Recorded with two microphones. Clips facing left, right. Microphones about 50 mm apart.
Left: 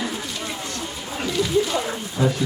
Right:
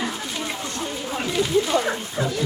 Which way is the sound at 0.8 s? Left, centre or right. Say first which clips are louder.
Right 2 dB; centre.